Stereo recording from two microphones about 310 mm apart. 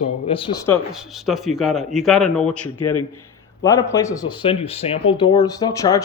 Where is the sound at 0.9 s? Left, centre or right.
Centre.